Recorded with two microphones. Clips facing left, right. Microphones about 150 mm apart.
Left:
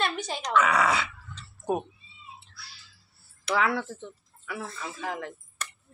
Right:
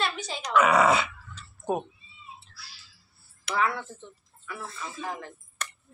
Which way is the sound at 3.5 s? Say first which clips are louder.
Left 1 dB; 90° left.